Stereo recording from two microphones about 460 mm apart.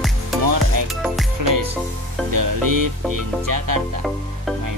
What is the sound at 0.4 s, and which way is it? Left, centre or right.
Music, right.